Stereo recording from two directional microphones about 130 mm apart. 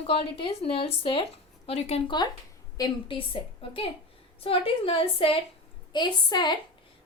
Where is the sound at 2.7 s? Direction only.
35° left (ahead or behind).